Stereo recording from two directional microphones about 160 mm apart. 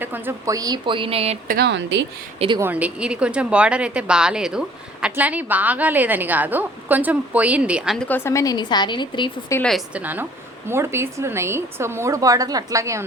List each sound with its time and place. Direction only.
0.0 s speech: 15° right (ahead or behind); by 1.4 s 40° right (ahead or behind)
1.5 s speech: 80° right
2.6 s a woman's voice: 10° right (ahead or behind)
7.9 s a woman's voice: 10° left (ahead or behind); by 9.3 s 30° left (ahead or behind)
9.6 s a woman's voice: centre (ahead or behind)
10.0 s a woman's voice: 10° right (ahead or behind)